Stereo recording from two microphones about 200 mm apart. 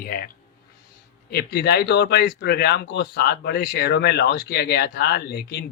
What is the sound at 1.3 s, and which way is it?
Speech, 50° left (ahead or behind).